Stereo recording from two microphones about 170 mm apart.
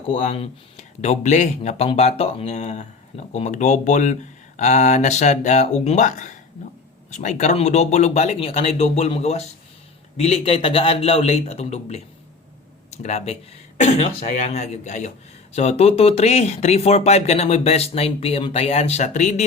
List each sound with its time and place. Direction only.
0.1 s speech: 35° left (ahead or behind)